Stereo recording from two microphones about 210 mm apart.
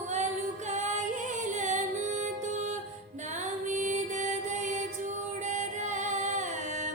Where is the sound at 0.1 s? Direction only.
35° right (ahead or behind).